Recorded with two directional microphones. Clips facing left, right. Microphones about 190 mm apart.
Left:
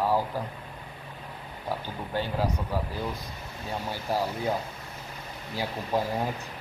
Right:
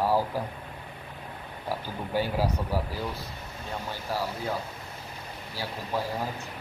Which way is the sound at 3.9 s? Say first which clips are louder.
Left 3 dB; 15° left (ahead or behind).